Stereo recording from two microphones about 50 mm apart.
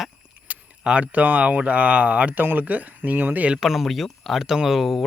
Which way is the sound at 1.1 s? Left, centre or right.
Right.